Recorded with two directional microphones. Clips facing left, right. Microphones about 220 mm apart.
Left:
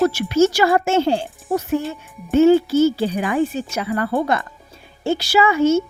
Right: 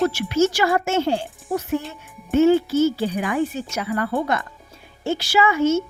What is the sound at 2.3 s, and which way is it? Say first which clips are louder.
A woman's voice: left 3 dB; 30° left (ahead or behind).